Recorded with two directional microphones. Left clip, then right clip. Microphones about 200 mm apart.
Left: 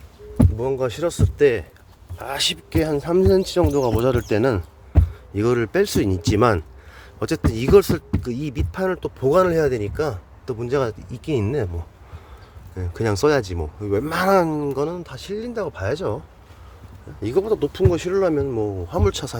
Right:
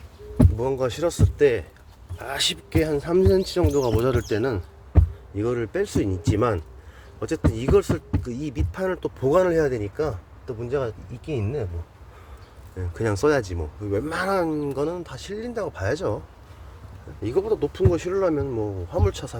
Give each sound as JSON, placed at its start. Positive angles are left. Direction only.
{"t": 0.5, "sound": "speech", "side_deg": 15}
{"t": 3.9, "sound": "speech", "side_deg": 15}
{"t": 12.7, "sound": "speech", "side_deg": 15}
{"t": 17.2, "sound": "speech", "side_deg": 25}